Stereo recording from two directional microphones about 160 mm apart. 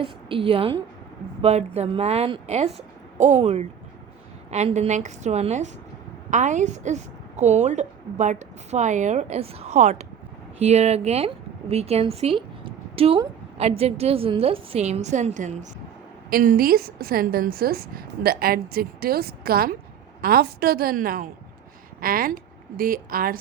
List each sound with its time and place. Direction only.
0.0 s a woman's voice: 35° right (ahead or behind)
16.3 s a woman's voice: 60° right (ahead or behind)